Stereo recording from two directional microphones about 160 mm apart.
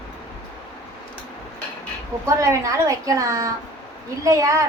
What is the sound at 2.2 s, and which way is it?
A woman's voice, 20° right (ahead or behind).